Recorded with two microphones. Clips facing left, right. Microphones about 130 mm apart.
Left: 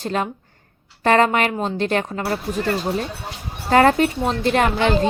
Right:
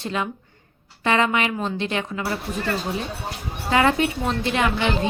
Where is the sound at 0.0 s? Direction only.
40° left (ahead or behind).